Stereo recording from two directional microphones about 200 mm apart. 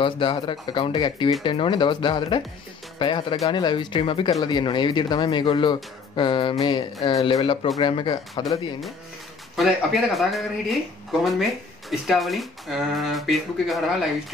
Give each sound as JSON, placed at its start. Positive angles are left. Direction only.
{"t": 0.0, "sound": "speech", "side_deg": 25}
{"t": 9.6, "sound": "speech", "side_deg": 0}